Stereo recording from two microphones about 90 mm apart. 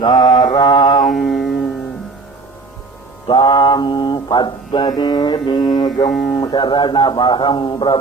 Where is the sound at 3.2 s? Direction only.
60° left (ahead or behind).